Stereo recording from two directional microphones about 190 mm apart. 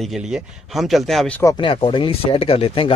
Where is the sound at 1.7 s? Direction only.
25° left (ahead or behind).